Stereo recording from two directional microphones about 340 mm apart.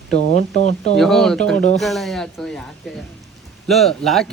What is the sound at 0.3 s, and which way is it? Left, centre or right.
Speech, centre.